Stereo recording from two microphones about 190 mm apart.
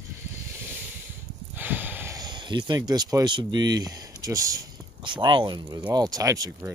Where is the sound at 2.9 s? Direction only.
20° right (ahead or behind).